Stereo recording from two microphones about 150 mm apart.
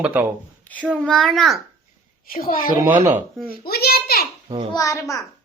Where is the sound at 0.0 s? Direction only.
10° right (ahead or behind).